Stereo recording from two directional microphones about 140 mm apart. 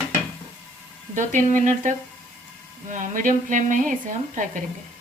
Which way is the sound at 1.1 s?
65° right (ahead or behind).